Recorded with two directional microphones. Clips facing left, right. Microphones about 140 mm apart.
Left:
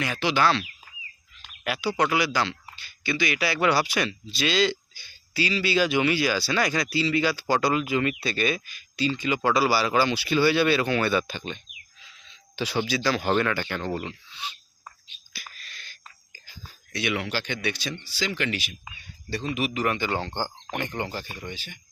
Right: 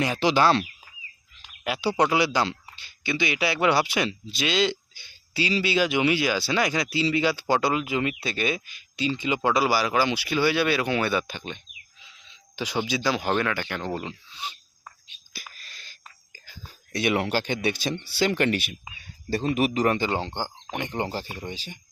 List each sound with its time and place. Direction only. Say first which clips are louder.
0.0 s speech: right 3 dB; 30° right (ahead or behind)
1.6 s speech: right 2 dB; 25° right (ahead or behind); by 11.6 s 10° right (ahead or behind)
11.9 s a sound: even; 20° right (ahead or behind)
13.2 s speech: left 1 dB; centre (ahead or behind)
16.5 s speech: right 4 dB; 45° right (ahead or behind)
18.0 s speech: right 6 dB; 60° right (ahead or behind)
19.3 s speech: right 5 dB; 40° right (ahead or behind)